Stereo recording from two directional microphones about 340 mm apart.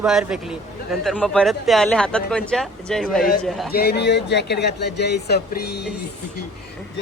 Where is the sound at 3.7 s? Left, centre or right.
Left.